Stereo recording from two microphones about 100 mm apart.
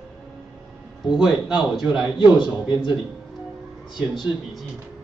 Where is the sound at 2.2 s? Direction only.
55° left (ahead or behind).